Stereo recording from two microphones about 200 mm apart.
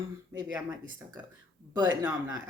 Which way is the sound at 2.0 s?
20° right (ahead or behind).